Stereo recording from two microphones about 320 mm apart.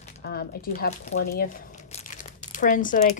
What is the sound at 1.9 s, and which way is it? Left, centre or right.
Crumpling, left.